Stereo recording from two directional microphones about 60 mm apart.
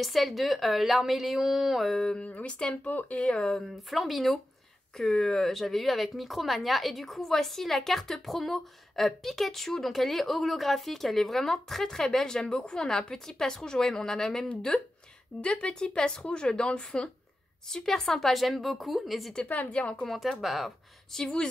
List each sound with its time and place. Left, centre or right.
0.0 s speech: centre
2.0 s speech: centre
2.9 s a woman's voice: left
3.3 s speech: centre
3.7 s speech: centre
15.4 s speech: centre
19.4 s a woman's voice: left
20.1 s speech: centre